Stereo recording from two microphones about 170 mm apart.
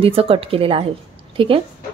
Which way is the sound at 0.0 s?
35° right (ahead or behind).